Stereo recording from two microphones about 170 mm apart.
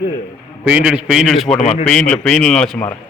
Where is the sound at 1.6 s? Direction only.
40° left (ahead or behind).